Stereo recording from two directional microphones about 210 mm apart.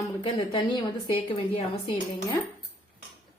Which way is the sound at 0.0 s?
25° left (ahead or behind).